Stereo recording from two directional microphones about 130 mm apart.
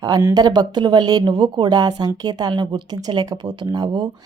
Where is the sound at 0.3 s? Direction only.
30° right (ahead or behind).